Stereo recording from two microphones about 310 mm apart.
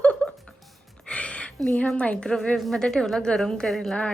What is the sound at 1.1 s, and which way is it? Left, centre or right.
A woman's voice, centre.